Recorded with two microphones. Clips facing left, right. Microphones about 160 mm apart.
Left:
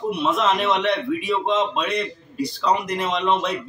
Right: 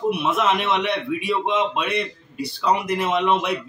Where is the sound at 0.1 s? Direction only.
5° right (ahead or behind).